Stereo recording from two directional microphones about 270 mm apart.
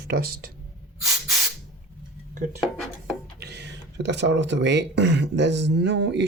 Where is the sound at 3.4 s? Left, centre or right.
Right.